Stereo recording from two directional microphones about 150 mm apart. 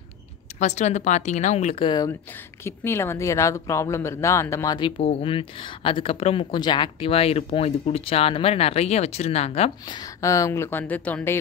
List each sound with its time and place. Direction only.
0.6 s speech: 50° left (ahead or behind)
1.9 s a woman's voice: 25° left (ahead or behind)
4.7 s speech: 35° left (ahead or behind)
9.8 s speech: 25° left (ahead or behind)